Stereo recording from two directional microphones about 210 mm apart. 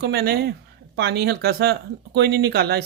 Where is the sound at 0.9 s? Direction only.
50° right (ahead or behind).